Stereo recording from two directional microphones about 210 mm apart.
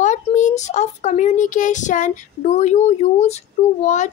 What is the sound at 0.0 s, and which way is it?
Speech, 35° left (ahead or behind).